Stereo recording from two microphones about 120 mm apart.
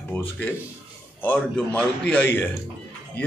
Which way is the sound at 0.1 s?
15° left (ahead or behind).